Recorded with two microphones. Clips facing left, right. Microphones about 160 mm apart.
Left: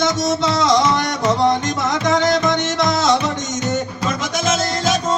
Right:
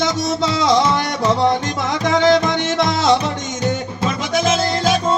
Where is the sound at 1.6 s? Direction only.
45° left (ahead or behind).